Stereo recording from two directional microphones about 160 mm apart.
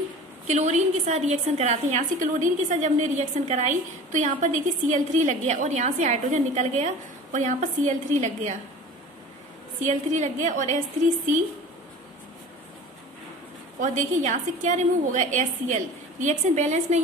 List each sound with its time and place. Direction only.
0.5 s a woman's voice: 45° right (ahead or behind)
9.8 s a woman's voice: 50° right (ahead or behind)
13.7 s a woman's voice: 50° right (ahead or behind)